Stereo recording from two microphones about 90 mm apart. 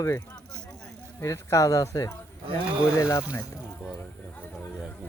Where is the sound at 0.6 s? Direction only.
10° left (ahead or behind).